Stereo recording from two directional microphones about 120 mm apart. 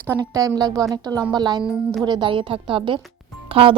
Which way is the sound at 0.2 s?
30° right (ahead or behind).